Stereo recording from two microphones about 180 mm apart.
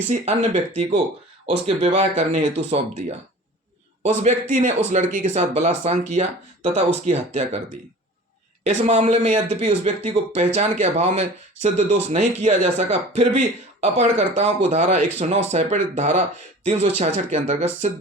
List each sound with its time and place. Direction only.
0.1 s speech: 40° right (ahead or behind)
8.6 s speech: 40° right (ahead or behind)